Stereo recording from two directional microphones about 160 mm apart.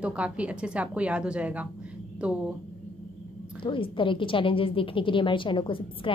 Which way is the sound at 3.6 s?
30° left (ahead or behind).